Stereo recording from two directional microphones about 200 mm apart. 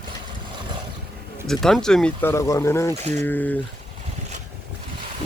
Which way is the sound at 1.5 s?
Centre (ahead or behind).